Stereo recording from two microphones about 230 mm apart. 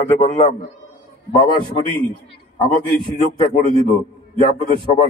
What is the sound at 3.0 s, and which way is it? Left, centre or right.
A man's voice, left.